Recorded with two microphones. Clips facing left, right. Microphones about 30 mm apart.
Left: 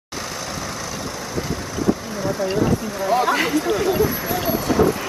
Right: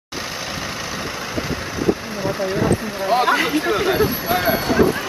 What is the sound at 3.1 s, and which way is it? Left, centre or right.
Speech, right.